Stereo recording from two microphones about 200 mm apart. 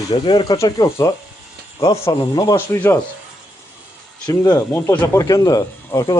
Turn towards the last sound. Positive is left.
turn(degrees=15)  # may be behind; listen again after turning